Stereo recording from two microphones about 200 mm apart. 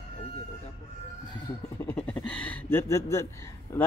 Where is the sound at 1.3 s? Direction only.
15° left (ahead or behind).